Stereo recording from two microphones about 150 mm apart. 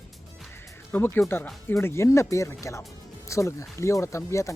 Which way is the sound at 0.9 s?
15° left (ahead or behind).